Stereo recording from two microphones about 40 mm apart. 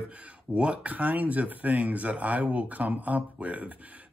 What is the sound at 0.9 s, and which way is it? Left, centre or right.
Speech, right.